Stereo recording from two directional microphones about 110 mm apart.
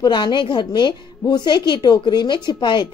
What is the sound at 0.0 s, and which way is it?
Speech, 40° left (ahead or behind).